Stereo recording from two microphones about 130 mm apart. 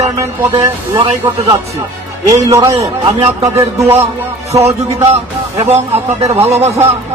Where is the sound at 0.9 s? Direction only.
30° right (ahead or behind).